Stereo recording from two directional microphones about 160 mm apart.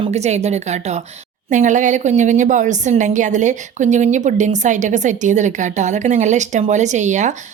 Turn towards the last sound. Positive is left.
turn(degrees=-50)  # may be behind; listen again after turning